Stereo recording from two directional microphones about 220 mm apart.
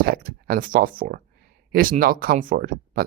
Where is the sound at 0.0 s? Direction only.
40° right (ahead or behind).